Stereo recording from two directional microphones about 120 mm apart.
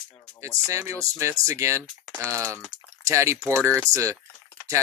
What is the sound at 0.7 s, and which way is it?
Speech, 25° right (ahead or behind).